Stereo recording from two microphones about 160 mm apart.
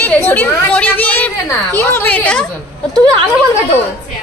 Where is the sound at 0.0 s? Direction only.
10° left (ahead or behind).